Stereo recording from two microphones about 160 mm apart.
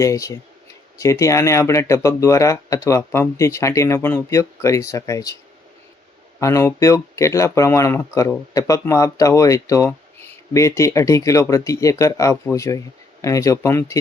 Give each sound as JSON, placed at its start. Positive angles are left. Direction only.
{"t": 0.0, "sound": "speech", "side_deg": 20}
{"t": 6.4, "sound": "speech", "side_deg": 20}